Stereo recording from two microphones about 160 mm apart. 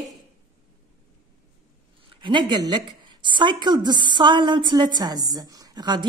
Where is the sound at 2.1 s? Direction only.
30° right (ahead or behind).